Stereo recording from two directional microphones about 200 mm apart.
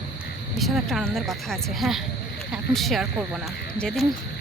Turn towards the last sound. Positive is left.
turn(degrees=5)  # may be behind; listen again after turning